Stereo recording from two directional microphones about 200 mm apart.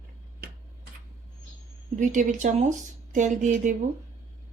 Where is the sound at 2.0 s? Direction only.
40° right (ahead or behind).